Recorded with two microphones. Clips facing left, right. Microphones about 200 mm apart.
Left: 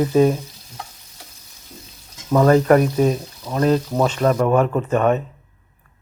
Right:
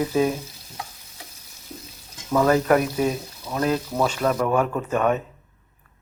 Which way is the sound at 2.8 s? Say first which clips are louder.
Left 5 dB; 40° left (ahead or behind).